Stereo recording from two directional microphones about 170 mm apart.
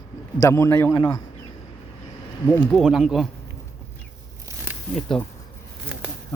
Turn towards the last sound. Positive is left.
turn(degrees=5)  # may be behind; listen again after turning